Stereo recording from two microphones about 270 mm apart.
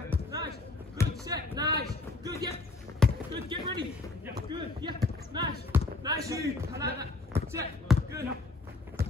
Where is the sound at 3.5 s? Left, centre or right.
Centre.